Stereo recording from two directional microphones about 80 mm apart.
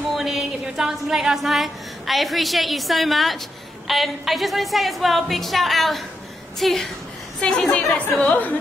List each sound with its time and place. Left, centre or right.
0.1 s a woman's voice: centre
7.3 s a woman's voice: centre